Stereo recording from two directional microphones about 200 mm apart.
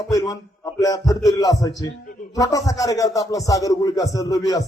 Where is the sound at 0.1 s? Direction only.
15° left (ahead or behind).